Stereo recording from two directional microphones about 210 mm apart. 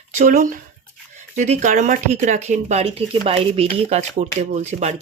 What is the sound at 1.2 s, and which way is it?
Speech, 35° right (ahead or behind).